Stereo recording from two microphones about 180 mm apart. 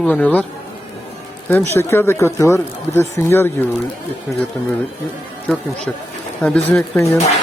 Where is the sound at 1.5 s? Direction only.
15° left (ahead or behind).